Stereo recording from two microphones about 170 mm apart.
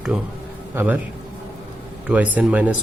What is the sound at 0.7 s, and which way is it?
Speech, 15° right (ahead or behind).